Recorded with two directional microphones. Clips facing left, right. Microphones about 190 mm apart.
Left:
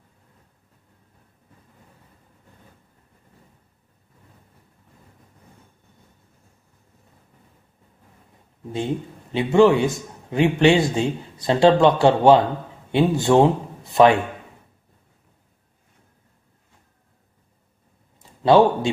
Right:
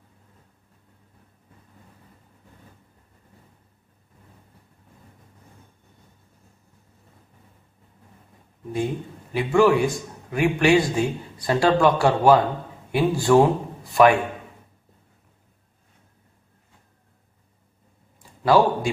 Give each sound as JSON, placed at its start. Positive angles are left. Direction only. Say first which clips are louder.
{"t": 8.7, "sound": "a man's voice", "louder": "left 1 dB", "side_deg": 25}
{"t": 18.4, "sound": "a man's voice", "louder": "left 3 dB", "side_deg": 25}